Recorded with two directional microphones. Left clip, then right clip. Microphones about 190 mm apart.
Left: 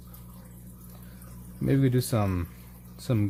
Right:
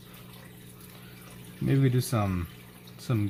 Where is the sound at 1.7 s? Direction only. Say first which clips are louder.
Left 2 dB; 45° left (ahead or behind).